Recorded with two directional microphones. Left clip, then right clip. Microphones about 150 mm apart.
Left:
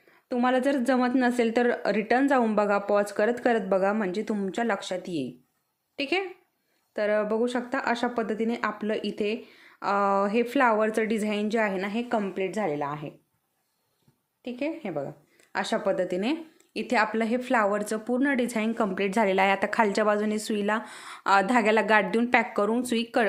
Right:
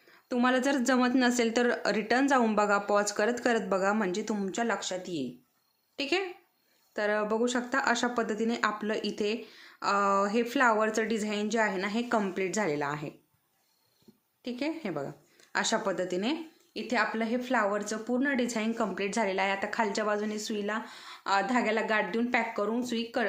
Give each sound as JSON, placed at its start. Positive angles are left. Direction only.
{"t": 0.3, "sound": "speech", "side_deg": 15}
{"t": 6.0, "sound": "a woman's voice", "side_deg": 20}
{"t": 14.4, "sound": "speech", "side_deg": 10}
{"t": 16.8, "sound": "a woman's voice", "side_deg": 40}